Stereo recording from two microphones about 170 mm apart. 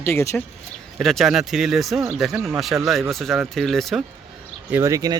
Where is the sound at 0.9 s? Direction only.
Centre (ahead or behind).